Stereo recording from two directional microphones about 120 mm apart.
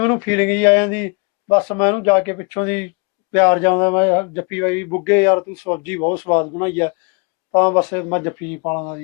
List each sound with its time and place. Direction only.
0.0 s speech: 20° left (ahead or behind)